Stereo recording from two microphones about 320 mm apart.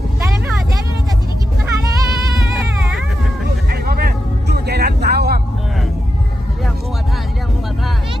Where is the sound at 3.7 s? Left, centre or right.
Right.